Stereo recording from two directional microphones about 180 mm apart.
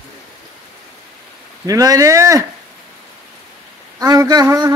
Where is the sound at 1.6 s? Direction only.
20° right (ahead or behind).